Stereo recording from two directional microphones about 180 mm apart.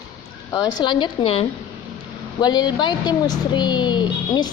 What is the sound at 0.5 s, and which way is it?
A woman's voice, 25° left (ahead or behind).